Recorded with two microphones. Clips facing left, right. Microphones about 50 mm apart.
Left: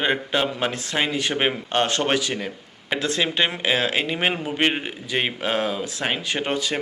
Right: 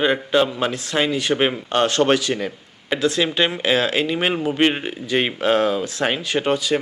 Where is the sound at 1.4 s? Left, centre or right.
Centre.